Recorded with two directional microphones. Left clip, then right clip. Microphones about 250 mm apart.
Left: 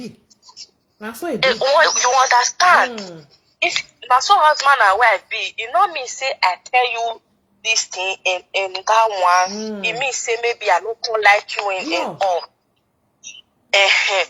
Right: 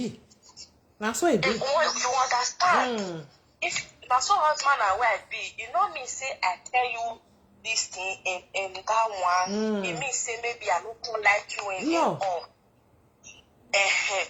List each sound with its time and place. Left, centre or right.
0.3 s a sound: left
0.9 s speech: centre
1.4 s speech: left
9.6 s a woman's voice: centre
9.8 s speech: left
13.7 s speech: left